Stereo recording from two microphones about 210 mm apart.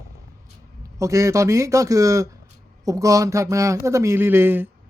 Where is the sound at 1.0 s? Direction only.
15° right (ahead or behind).